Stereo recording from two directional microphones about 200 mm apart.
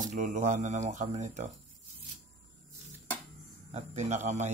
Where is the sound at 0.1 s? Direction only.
40° right (ahead or behind).